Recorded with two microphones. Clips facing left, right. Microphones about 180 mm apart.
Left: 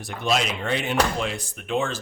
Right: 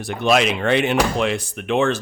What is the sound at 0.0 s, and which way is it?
Speech, 70° right (ahead or behind).